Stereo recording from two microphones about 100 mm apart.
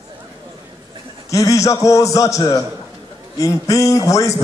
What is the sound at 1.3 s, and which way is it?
A man's voice, 35° left (ahead or behind).